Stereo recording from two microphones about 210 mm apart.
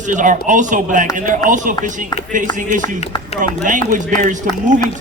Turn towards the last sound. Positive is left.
turn(degrees=-35)  # may be behind; listen again after turning